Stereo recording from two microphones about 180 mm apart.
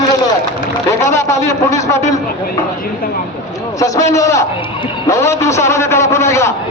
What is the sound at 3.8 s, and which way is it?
A man's voice, 20° left (ahead or behind).